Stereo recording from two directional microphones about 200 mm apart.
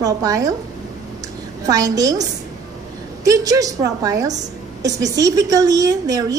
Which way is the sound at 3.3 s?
15° right (ahead or behind).